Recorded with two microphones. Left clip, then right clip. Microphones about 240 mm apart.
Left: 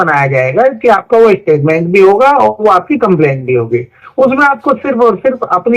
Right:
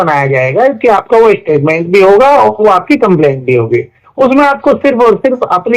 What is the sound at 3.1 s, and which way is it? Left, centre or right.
Speech, right.